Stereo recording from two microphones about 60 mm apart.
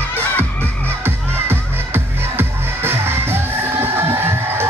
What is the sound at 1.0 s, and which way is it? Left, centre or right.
Music, right.